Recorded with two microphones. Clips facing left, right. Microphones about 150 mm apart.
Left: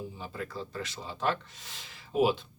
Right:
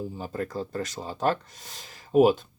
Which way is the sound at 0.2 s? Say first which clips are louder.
Right 7 dB; 45° right (ahead or behind).